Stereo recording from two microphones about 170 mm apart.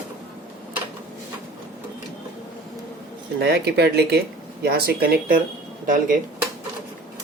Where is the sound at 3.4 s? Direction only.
80° right; by 6.2 s 50° right (ahead or behind).